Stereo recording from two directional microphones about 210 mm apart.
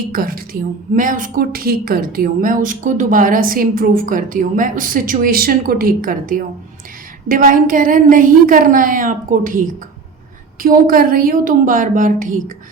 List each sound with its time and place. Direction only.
0.1 s a woman's voice: 45° right (ahead or behind)
10.6 s a woman's voice: 40° right (ahead or behind)